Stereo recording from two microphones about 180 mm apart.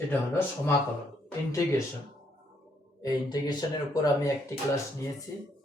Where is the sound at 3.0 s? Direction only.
20° left (ahead or behind).